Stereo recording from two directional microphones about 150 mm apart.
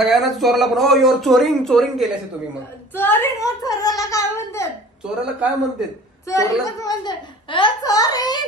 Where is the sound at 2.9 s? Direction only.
15° left (ahead or behind).